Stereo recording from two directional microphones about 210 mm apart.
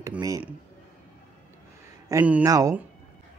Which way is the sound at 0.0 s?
15° right (ahead or behind).